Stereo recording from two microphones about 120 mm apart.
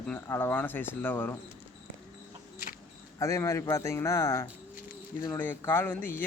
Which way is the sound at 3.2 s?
25° left (ahead or behind).